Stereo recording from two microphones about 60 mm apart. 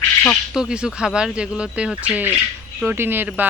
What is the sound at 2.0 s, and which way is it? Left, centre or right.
Speech, right.